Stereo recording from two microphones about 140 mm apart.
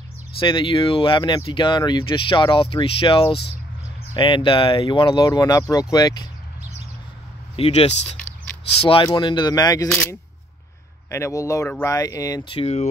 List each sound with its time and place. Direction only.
0.4 s speech: 35° left (ahead or behind)
7.5 s speech: 45° left (ahead or behind)
8.8 s speech: 35° left (ahead or behind)
11.1 s speech: 20° left (ahead or behind)
12.4 s speech: 45° left (ahead or behind)